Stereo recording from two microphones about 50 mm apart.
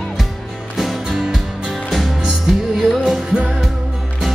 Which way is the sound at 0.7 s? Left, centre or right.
Centre.